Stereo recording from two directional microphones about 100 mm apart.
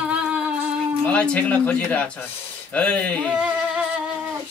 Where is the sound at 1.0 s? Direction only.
10° left (ahead or behind).